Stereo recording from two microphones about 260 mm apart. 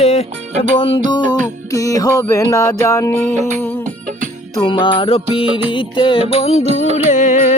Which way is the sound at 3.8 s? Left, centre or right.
Right.